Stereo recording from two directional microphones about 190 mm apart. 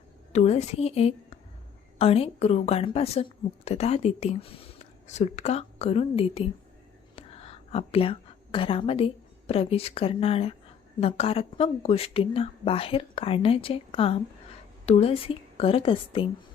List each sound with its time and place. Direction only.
0.3 s a woman's voice: 35° left (ahead or behind)